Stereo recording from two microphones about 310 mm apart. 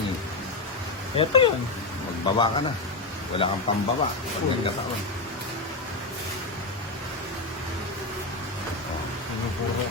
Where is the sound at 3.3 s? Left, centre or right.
Centre.